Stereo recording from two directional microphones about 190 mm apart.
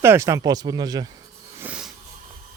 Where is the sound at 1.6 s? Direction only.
5° right (ahead or behind).